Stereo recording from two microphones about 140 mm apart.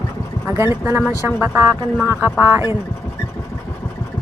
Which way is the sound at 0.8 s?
15° right (ahead or behind).